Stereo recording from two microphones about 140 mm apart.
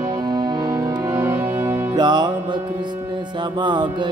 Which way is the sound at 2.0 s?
30° right (ahead or behind).